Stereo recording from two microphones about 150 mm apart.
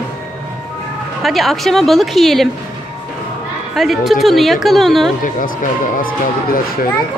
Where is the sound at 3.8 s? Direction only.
Centre (ahead or behind).